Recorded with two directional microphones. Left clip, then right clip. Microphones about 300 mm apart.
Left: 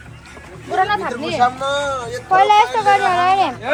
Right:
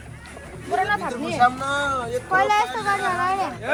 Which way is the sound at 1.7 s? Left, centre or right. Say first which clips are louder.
Left 3 dB; centre.